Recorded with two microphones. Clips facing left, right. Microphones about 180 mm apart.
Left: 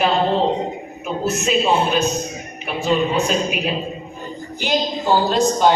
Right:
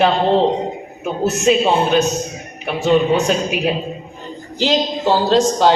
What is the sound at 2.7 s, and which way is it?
Speech, 75° right (ahead or behind).